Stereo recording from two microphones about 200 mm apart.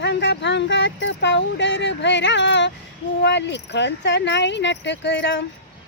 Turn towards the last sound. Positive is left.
turn(degrees=65)  # may be behind; listen again after turning